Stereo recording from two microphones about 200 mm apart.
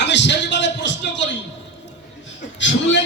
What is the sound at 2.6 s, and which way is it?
Speech, 65° left (ahead or behind).